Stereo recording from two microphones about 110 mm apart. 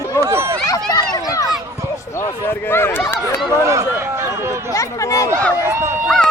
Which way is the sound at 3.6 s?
25° right (ahead or behind).